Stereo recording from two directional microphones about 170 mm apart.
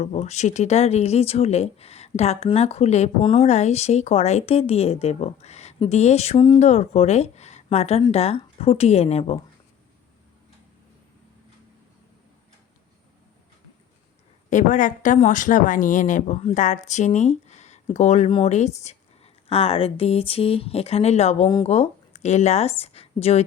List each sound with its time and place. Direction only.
0.0 s speech: 40° left (ahead or behind)
14.5 s speech: 50° left (ahead or behind)
18.3 s speech: 30° left (ahead or behind)
18.5 s speech: 40° left (ahead or behind)